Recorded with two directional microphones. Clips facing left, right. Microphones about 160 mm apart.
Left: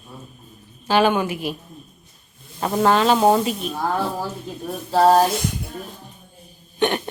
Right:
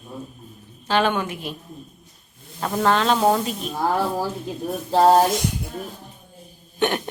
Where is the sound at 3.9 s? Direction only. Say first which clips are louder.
Right 1 dB; 10° right (ahead or behind).